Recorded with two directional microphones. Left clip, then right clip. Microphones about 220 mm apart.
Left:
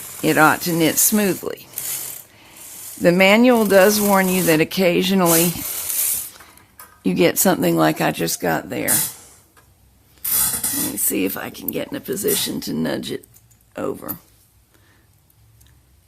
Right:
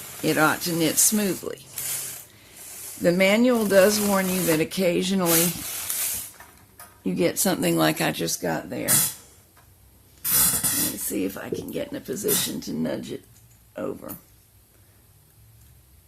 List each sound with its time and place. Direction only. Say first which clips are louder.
0.2 s speech: left 7 dB; 25° left (ahead or behind)
3.0 s speech: left 6 dB; 25° left (ahead or behind)
7.0 s speech: left 7 dB; 30° left (ahead or behind)
11.1 s speech: left 6 dB; 35° left (ahead or behind)